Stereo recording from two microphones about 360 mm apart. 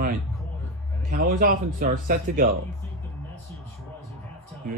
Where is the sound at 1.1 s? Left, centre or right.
Right.